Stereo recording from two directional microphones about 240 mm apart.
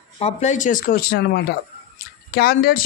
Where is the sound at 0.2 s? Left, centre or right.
Left.